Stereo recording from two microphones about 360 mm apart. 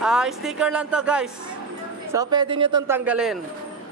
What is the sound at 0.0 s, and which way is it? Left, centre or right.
A man's voice, centre.